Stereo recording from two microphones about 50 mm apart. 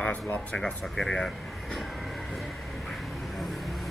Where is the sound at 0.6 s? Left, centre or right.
Centre.